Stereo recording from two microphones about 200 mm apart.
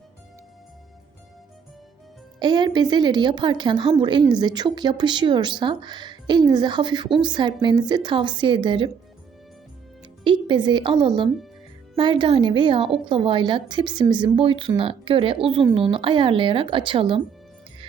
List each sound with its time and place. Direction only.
2.4 s a woman's voice: 20° right (ahead or behind)
10.2 s a woman's voice: 25° right (ahead or behind)